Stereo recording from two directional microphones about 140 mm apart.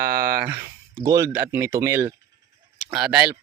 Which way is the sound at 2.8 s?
5° right (ahead or behind).